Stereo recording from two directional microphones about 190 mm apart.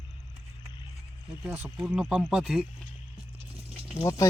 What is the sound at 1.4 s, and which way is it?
Speech, 5° right (ahead or behind).